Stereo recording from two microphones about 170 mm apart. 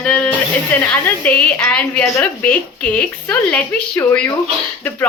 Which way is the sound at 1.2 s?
10° left (ahead or behind).